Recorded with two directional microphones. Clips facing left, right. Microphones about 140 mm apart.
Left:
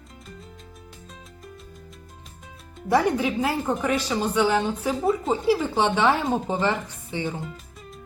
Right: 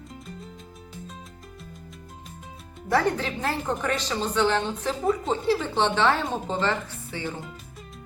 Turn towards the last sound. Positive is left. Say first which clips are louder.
# left 3 dB
turn(degrees=15)  # may be behind; listen again after turning